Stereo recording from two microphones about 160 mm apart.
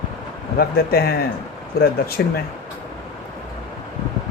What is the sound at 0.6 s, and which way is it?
Speech, 70° left (ahead or behind).